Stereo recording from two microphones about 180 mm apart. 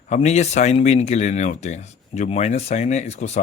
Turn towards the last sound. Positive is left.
turn(degrees=40)  # may be behind; listen again after turning